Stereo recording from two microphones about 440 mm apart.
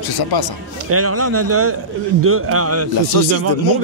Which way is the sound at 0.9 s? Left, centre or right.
Right.